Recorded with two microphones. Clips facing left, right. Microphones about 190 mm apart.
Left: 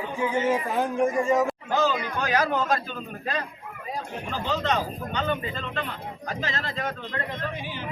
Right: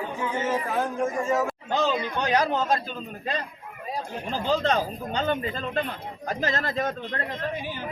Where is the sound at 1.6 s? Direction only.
20° right (ahead or behind).